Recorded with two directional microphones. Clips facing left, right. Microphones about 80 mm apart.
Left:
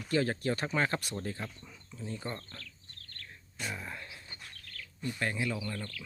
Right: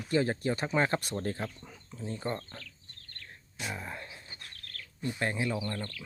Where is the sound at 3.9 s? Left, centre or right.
Right.